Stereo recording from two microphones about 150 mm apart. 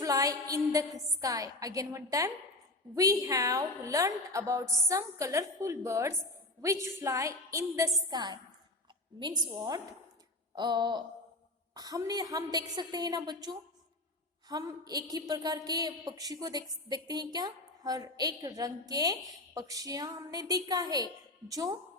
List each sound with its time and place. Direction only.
0.0 s a woman's voice: 25° right (ahead or behind)